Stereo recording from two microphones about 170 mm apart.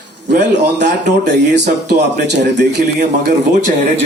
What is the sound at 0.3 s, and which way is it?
Speech, 85° right.